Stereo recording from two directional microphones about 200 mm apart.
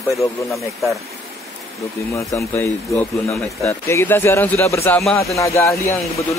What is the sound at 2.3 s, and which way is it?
A man's voice, 15° left (ahead or behind).